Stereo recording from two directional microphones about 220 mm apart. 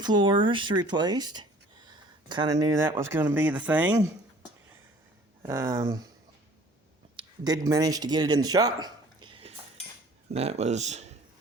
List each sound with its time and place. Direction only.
0.0 s speech: 20° right (ahead or behind)
5.4 s speech: 15° right (ahead or behind)
7.2 s speech: 15° right (ahead or behind)